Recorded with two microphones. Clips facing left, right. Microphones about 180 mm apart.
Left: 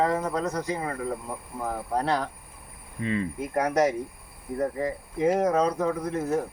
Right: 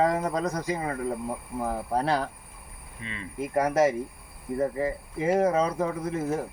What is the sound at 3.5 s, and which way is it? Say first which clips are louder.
Speech: right 1 dB; 5° right (ahead or behind).